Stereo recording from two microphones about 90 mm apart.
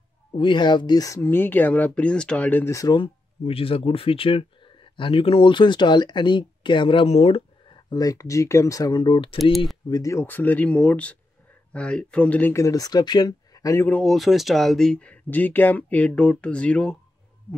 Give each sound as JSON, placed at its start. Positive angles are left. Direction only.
{"t": 0.4, "sound": "speech", "side_deg": 60}
{"t": 1.2, "sound": "speech", "side_deg": 20}
{"t": 2.6, "sound": "speech", "side_deg": 35}
{"t": 2.9, "sound": "speech", "side_deg": 80}
{"t": 7.9, "sound": "speech", "side_deg": 45}
{"t": 9.8, "sound": "speech", "side_deg": 45}
{"t": 10.1, "sound": "speech", "side_deg": 20}
{"t": 12.5, "sound": "speech", "side_deg": 40}
{"t": 13.7, "sound": "speech", "side_deg": 20}
{"t": 14.0, "sound": "speech", "side_deg": 0}